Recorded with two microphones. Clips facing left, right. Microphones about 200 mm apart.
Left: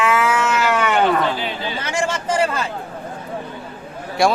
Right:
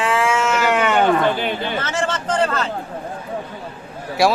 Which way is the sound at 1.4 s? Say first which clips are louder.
Right 3 dB; 55° right (ahead or behind).